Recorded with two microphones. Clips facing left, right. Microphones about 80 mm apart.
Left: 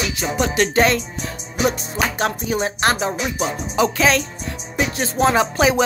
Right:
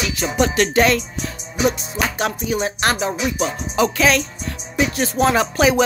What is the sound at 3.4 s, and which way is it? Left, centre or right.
Music, left.